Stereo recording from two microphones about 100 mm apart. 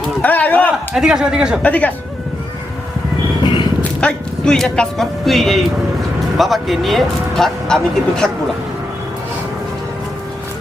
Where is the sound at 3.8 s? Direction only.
10° left (ahead or behind).